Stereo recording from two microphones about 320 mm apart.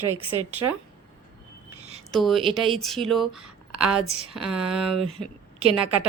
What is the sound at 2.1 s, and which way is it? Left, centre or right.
Speech, centre.